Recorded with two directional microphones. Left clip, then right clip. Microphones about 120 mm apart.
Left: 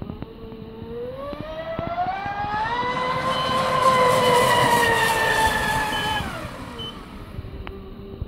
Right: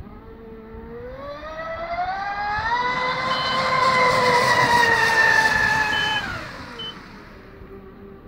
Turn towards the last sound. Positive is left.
turn(degrees=0)  # may be behind; listen again after turning